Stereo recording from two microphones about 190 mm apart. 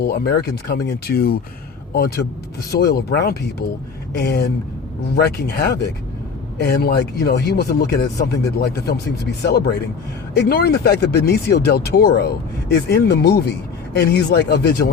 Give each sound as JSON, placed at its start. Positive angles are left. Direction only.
{"t": 0.0, "sound": "speech", "side_deg": 55}